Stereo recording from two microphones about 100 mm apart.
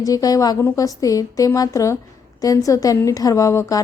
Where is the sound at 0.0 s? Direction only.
35° left (ahead or behind).